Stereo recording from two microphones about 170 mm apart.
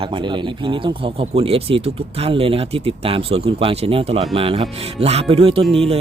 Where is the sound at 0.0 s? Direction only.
30° right (ahead or behind).